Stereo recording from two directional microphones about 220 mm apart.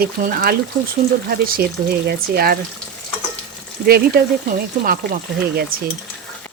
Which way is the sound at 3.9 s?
45° right (ahead or behind).